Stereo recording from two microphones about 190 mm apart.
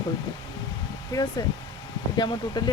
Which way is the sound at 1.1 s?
20° left (ahead or behind).